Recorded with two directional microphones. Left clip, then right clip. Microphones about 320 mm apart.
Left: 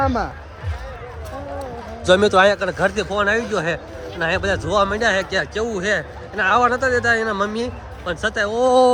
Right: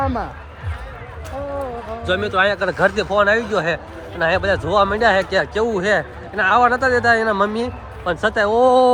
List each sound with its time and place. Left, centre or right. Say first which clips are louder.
0.0 s speech: left 2 dB; left
2.0 s speech: left 4 dB; centre